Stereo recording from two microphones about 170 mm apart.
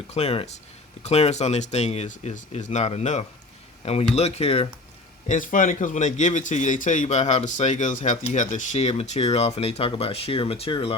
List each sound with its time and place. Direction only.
0.1 s speech: 35° left (ahead or behind)
5.3 s speech: 50° left (ahead or behind); by 10.9 s 30° left (ahead or behind)